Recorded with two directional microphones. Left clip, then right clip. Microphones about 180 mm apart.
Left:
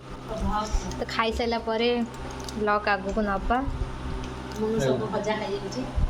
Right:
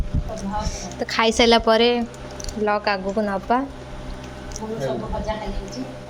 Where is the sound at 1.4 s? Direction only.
40° right (ahead or behind).